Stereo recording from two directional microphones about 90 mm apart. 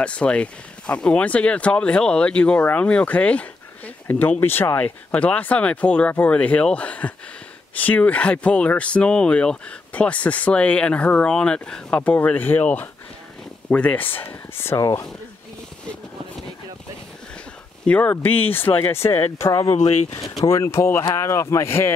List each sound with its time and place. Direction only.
0.0 s speech: 10° left (ahead or behind)
14.8 s speech: 40° left (ahead or behind)
17.8 s speech: 15° left (ahead or behind)